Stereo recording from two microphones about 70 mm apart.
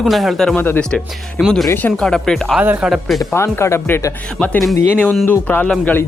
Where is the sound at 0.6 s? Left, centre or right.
Left.